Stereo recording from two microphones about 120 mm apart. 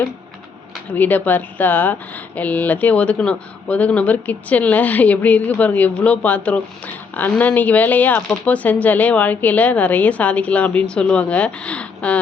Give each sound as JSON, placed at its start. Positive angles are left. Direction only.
{"t": 0.9, "sound": "speech", "side_deg": 15}